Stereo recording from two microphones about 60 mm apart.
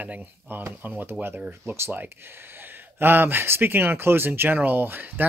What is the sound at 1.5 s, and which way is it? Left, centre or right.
Speech, right.